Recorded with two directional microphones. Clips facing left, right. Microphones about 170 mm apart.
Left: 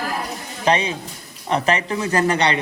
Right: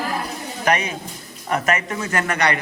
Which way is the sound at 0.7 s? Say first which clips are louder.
Left 2 dB; 30° left (ahead or behind).